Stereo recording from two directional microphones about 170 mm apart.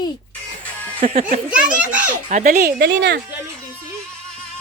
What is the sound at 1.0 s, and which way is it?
Speech, 40° right (ahead or behind).